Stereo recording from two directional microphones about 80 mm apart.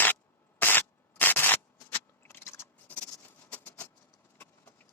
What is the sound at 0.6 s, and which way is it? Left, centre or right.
Scissors, left.